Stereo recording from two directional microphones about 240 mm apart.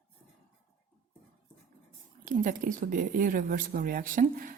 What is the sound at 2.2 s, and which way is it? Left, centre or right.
A woman's voice, right.